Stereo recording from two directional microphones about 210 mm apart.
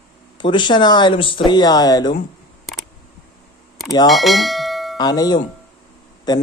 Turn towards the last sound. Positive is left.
turn(degrees=20)  # may be behind; listen again after turning